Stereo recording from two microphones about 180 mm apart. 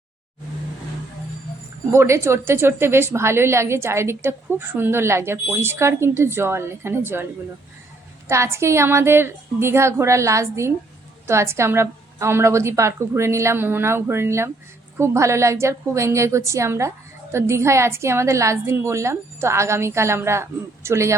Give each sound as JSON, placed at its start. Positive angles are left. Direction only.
{"t": 1.9, "sound": "a woman's voice", "side_deg": -15}
{"t": 8.3, "sound": "a woman's voice", "side_deg": -15}